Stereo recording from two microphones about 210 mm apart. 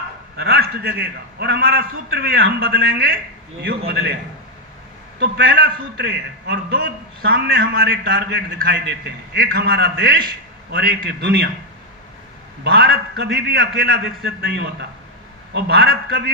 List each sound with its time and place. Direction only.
0.3 s a man's voice: 50° right (ahead or behind)
5.2 s a man's voice: 55° right (ahead or behind)
12.6 s a man's voice: 50° right (ahead or behind)